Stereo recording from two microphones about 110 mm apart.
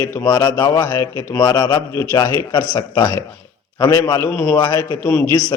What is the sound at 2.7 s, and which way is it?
A man's voice, 45° left (ahead or behind).